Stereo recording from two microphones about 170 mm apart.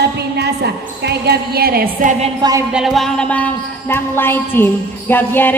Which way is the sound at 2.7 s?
Centre (ahead or behind).